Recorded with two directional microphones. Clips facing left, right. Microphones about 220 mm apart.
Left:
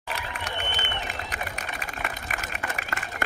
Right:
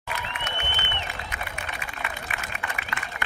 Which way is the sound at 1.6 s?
40° left (ahead or behind).